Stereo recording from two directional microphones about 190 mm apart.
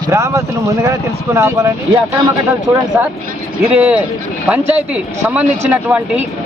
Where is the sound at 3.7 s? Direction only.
5° right (ahead or behind).